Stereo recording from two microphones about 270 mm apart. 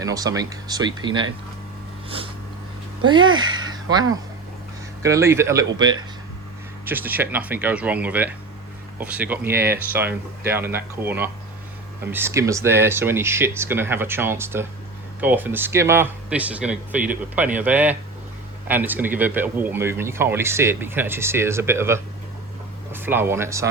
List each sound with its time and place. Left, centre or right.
0.0 s speech: centre
3.1 s speech: centre
3.7 s a sound: centre
5.0 s speech: centre